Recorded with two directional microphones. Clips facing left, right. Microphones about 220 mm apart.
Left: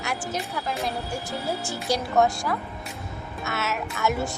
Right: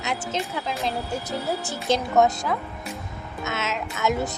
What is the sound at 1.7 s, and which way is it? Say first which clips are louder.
Speech: right 3 dB; 20° right (ahead or behind).